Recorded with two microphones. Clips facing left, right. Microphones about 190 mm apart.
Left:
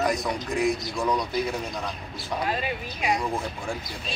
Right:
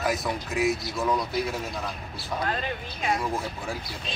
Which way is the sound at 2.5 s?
10° left (ahead or behind).